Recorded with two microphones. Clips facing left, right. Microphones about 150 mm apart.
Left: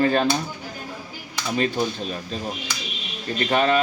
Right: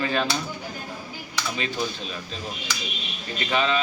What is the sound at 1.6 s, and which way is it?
Speech, 45° left (ahead or behind).